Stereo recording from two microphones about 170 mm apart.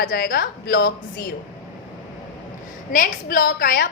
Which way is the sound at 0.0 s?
65° left (ahead or behind).